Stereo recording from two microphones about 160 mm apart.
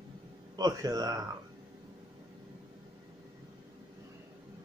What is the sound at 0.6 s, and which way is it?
Speech, 25° right (ahead or behind).